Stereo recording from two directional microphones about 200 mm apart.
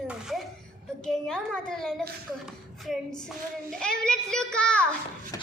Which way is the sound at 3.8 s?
5° left (ahead or behind).